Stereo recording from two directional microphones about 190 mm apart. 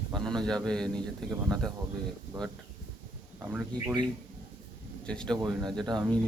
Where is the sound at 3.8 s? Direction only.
20° right (ahead or behind).